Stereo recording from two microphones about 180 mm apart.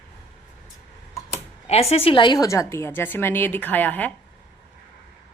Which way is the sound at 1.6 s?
35° left (ahead or behind).